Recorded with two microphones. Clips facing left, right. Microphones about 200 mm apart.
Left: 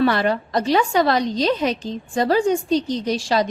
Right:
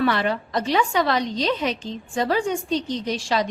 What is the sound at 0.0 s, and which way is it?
A woman's voice, 40° left (ahead or behind).